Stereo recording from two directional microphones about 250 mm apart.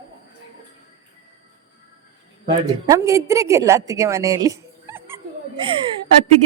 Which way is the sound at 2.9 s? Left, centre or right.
Centre.